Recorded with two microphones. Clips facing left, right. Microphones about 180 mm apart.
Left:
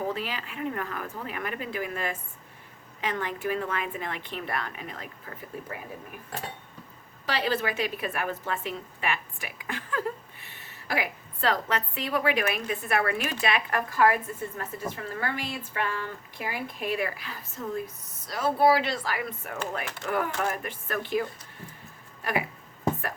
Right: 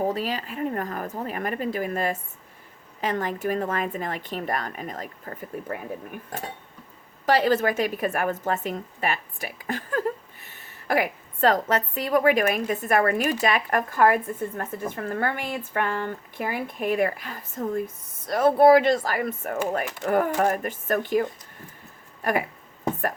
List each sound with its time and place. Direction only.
0.0 s speech: 40° right (ahead or behind)
7.3 s speech: 45° right (ahead or behind)